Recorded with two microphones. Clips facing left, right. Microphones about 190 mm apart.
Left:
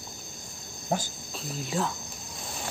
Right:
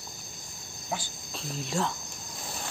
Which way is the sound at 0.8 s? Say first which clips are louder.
Left 6 dB; 45° left (ahead or behind).